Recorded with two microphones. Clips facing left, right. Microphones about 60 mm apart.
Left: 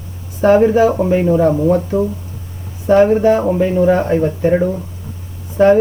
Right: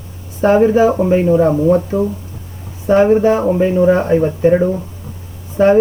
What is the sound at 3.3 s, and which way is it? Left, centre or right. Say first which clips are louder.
Speech: even; centre.